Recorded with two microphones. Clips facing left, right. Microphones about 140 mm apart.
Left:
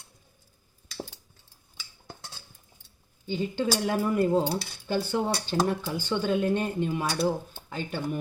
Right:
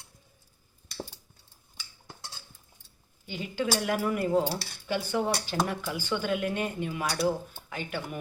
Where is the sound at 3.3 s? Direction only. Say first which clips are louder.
Left 3 dB; 30° left (ahead or behind).